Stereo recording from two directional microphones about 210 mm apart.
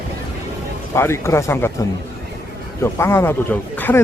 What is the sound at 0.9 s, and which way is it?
Speech, 10° left (ahead or behind).